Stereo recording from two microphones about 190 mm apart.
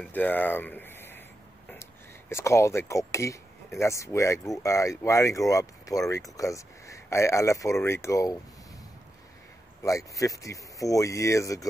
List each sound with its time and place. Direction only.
0.0 s speech: 10° left (ahead or behind)
9.8 s speech: 15° left (ahead or behind)